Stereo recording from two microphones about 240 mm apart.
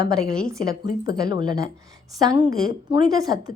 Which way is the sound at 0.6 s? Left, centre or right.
Left.